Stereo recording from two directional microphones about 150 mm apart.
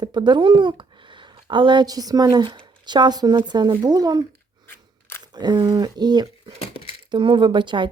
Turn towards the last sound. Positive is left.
turn(degrees=-30)  # may be behind; listen again after turning